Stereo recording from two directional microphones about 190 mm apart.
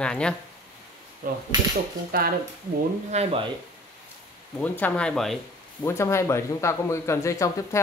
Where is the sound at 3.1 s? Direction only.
35° right (ahead or behind).